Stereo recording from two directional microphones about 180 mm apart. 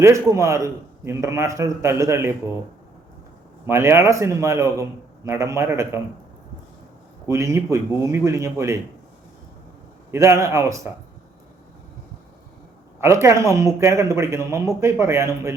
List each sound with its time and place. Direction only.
0.0 s speech: 15° right (ahead or behind)
3.7 s speech: 15° right (ahead or behind)
7.3 s speech: 15° right (ahead or behind)
10.1 s speech: 15° right (ahead or behind)
13.0 s speech: 15° right (ahead or behind)